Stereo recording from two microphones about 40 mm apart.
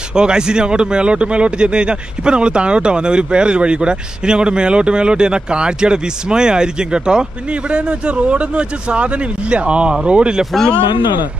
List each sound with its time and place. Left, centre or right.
0.1 s speech: centre